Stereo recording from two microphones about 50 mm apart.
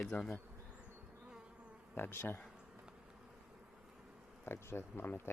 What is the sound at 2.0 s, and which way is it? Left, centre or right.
Speech, left.